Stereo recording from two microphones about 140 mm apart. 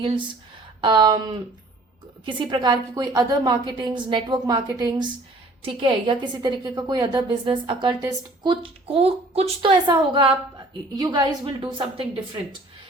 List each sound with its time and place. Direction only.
0.0 s a woman's voice: 35° right (ahead or behind)